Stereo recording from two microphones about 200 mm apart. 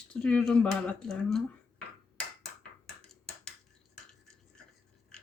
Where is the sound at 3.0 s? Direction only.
5° left (ahead or behind).